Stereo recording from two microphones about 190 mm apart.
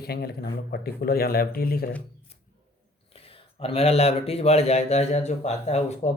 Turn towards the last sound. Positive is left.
turn(degrees=35)  # may be behind; listen again after turning